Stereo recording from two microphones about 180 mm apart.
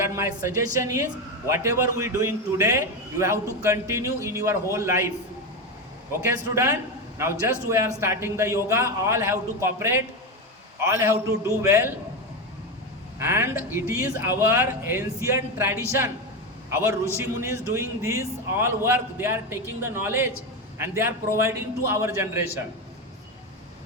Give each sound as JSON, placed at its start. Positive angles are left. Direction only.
{"t": 0.0, "sound": "a man's voice", "side_deg": -15}
{"t": 6.2, "sound": "a man's voice", "side_deg": -15}
{"t": 13.1, "sound": "a man's voice", "side_deg": -10}